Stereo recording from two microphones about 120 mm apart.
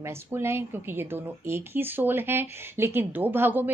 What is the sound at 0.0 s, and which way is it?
Speech, 20° right (ahead or behind).